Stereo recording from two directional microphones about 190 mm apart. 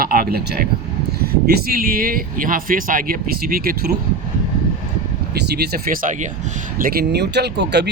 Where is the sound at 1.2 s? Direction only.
55° right (ahead or behind).